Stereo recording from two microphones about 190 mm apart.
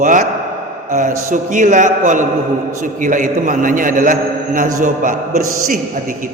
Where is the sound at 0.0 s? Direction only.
45° right (ahead or behind).